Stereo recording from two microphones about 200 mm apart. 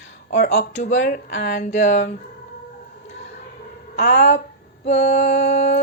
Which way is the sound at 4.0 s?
60° left (ahead or behind).